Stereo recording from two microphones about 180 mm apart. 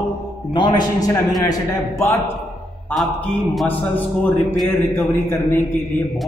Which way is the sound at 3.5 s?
10° left (ahead or behind).